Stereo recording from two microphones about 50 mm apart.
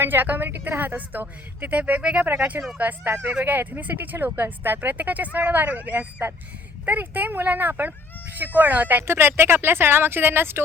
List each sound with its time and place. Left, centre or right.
0.0 s speech: right
2.7 s speech: right
9.0 s speech: right